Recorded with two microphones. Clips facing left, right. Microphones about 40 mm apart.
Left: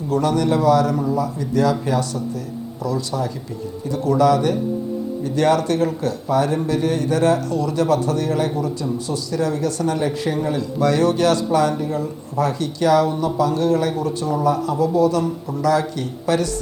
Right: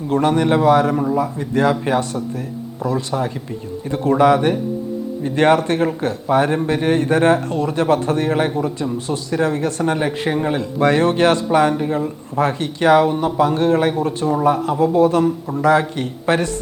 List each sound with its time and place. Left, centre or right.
0.1 s speech: right